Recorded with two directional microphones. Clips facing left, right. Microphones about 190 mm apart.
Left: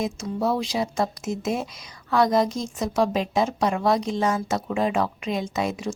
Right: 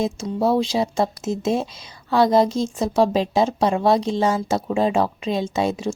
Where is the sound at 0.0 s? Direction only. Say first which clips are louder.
Right 4 dB; 30° right (ahead or behind).